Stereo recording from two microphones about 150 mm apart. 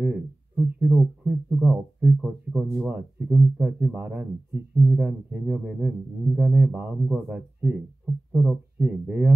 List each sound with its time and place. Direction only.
0.0 s speech: 5° right (ahead or behind)